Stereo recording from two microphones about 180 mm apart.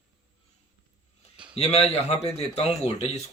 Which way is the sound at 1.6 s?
35° left (ahead or behind).